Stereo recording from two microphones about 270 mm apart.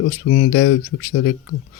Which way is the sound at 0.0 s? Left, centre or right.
Left.